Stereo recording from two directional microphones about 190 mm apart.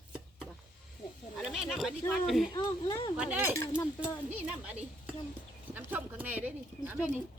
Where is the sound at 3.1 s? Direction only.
5° right (ahead or behind).